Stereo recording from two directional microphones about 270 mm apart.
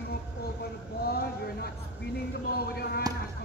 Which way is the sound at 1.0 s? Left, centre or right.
Left.